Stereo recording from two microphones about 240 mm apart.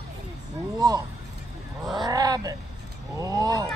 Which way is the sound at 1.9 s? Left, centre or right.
Centre.